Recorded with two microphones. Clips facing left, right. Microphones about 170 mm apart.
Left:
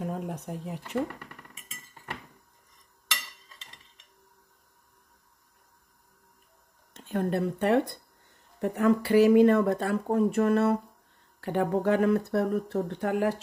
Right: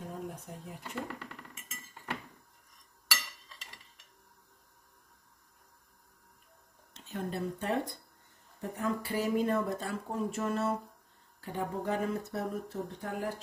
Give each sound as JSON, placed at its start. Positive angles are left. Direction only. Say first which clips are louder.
{"t": 0.0, "sound": "a sound", "louder": "left 7 dB", "side_deg": 75}
{"t": 0.8, "sound": "speech", "louder": "left 8 dB", "side_deg": 10}
{"t": 6.9, "sound": "speech", "louder": "left 9 dB", "side_deg": 55}